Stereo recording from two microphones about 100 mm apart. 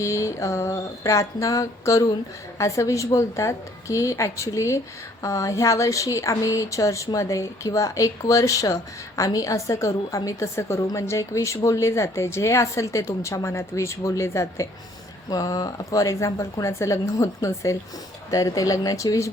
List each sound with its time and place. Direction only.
0.0 s speech: 30° left (ahead or behind)